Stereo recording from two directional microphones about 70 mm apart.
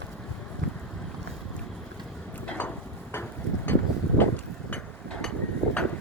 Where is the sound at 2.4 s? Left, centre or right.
Centre.